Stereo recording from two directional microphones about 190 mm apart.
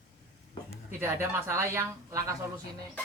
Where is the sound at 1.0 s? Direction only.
10° right (ahead or behind).